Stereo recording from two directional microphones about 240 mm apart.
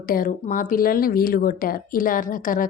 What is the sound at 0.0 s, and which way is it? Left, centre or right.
A woman's voice, left.